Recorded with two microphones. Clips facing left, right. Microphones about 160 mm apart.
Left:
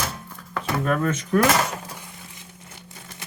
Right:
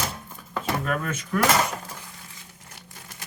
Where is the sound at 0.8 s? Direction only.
35° left (ahead or behind).